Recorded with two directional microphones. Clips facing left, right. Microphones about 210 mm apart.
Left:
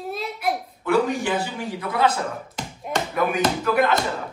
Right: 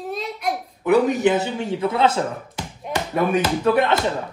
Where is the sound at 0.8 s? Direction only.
20° right (ahead or behind).